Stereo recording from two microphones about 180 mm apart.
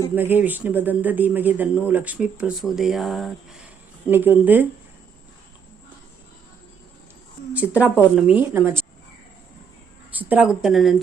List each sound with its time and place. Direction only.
0.2 s speech: 10° right (ahead or behind)
7.5 s speech: 10° right (ahead or behind)
10.1 s speech: 10° right (ahead or behind)